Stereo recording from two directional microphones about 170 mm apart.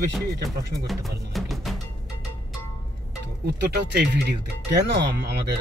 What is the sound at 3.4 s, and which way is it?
Speech, 75° right (ahead or behind).